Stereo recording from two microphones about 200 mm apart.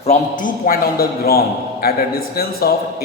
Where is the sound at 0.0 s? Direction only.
35° left (ahead or behind).